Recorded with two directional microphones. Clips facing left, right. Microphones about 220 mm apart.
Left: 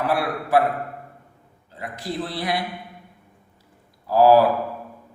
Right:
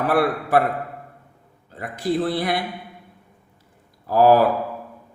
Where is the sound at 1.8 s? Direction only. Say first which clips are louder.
Right 7 dB; 55° right (ahead or behind).